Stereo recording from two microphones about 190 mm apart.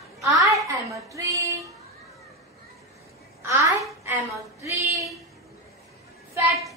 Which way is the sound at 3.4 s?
15° right (ahead or behind).